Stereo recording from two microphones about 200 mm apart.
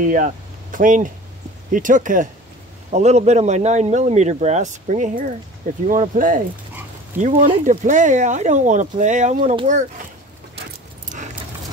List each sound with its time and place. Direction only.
0.0 s speech: 40° right (ahead or behind)